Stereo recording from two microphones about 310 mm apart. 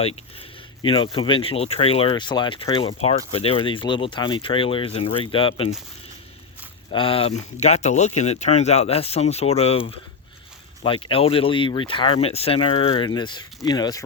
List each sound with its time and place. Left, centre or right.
0.8 s speech: centre
6.9 s speech: centre
10.8 s speech: centre